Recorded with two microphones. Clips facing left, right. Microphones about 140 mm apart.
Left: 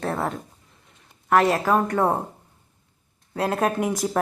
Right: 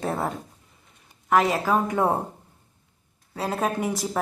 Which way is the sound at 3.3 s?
Centre (ahead or behind).